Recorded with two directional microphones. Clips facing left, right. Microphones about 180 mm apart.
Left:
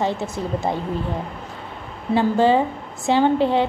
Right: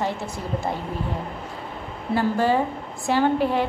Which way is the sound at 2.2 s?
25° left (ahead or behind).